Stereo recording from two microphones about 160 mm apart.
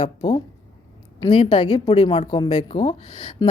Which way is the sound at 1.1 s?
30° left (ahead or behind).